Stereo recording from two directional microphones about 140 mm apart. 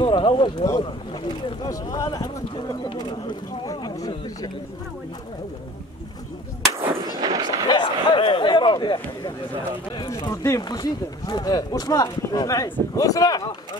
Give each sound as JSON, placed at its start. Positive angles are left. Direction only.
{"t": 0.0, "sound": "boat", "side_deg": 35}
{"t": 1.6, "sound": "speech", "side_deg": 25}
{"t": 7.2, "sound": "fireworks", "side_deg": -30}
{"t": 7.6, "sound": "a sound", "side_deg": 35}
{"t": 9.9, "sound": "speech", "side_deg": 25}